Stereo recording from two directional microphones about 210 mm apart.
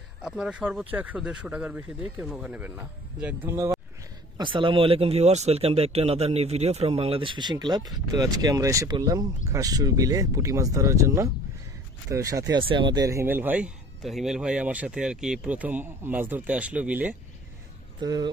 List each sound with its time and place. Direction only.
0.2 s speech: 5° right (ahead or behind)
4.4 s speech: 25° right (ahead or behind); by 17.1 s 5° right (ahead or behind)
18.0 s speech: 20° right (ahead or behind)